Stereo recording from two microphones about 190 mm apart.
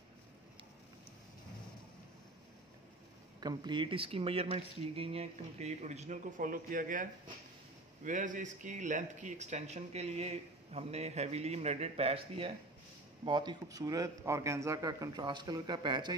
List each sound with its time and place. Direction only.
3.3 s a man's voice: 20° right (ahead or behind)